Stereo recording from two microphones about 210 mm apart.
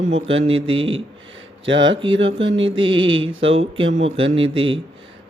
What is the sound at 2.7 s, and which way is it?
Mantra, 25° right (ahead or behind).